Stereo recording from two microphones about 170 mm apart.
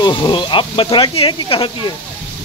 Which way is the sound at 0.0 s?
25° left (ahead or behind).